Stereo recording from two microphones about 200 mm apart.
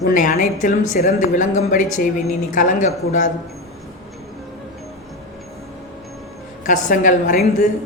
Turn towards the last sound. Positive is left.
turn(degrees=40)  # may be behind; listen again after turning